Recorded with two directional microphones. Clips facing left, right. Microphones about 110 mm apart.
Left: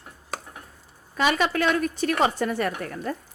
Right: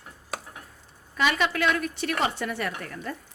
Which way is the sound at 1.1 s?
40° left (ahead or behind).